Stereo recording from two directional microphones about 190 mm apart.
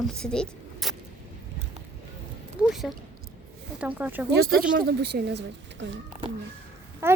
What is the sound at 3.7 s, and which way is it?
Speech, 10° right (ahead or behind).